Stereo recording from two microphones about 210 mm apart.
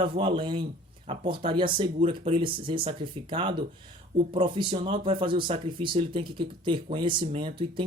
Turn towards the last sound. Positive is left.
turn(degrees=-25)  # may be behind; listen again after turning